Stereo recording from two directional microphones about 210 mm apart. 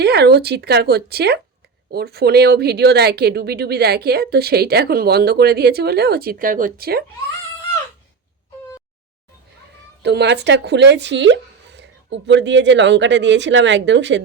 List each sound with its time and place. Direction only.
0.0 s speech: 50° right (ahead or behind)
10.0 s speech: 55° right (ahead or behind)